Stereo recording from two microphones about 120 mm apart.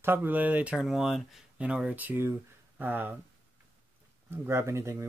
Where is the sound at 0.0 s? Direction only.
20° right (ahead or behind).